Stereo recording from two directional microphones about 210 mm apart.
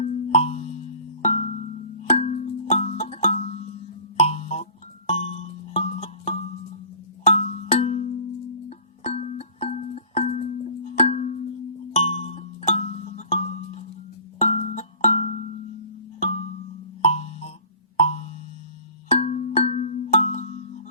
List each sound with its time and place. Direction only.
0.0 s music: 30° left (ahead or behind)